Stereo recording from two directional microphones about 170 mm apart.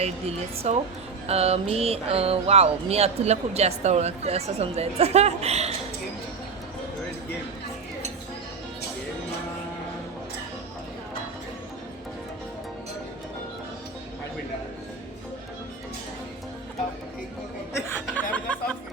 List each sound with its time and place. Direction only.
0.0 s speech: 40° right (ahead or behind)
17.8 s music: 10° left (ahead or behind)